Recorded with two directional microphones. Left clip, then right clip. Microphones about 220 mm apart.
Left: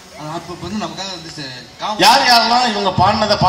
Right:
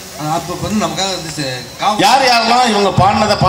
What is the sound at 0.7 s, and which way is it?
A woman's voice, 35° right (ahead or behind).